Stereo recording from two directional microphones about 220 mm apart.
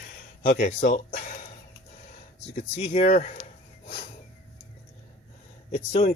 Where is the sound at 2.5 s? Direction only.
30° left (ahead or behind).